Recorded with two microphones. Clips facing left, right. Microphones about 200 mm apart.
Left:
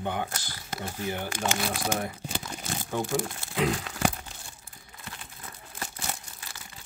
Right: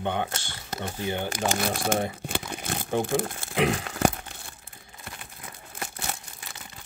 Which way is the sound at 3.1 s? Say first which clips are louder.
Right 3 dB; 55° right (ahead or behind).